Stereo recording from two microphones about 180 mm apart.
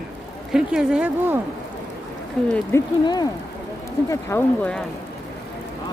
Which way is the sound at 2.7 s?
15° left (ahead or behind).